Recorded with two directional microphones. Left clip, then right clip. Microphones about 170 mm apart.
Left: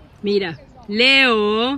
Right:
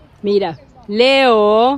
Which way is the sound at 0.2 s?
15° right (ahead or behind).